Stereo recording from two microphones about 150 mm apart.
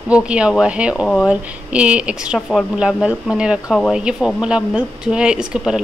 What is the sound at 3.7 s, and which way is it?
Speech, 5° left (ahead or behind).